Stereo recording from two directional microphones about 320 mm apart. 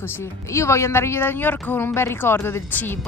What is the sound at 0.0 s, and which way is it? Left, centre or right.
Speech, centre.